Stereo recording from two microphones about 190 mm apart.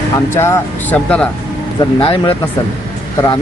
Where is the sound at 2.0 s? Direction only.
25° left (ahead or behind).